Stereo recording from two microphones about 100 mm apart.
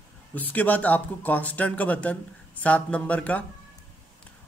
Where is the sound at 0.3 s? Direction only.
15° left (ahead or behind).